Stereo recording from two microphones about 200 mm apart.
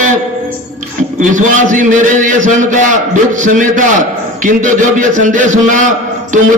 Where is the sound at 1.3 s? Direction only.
40° right (ahead or behind).